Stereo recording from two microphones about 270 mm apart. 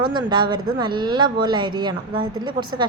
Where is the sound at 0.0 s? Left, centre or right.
Centre.